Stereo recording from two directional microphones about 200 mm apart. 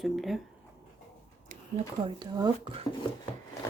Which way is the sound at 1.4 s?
35° right (ahead or behind).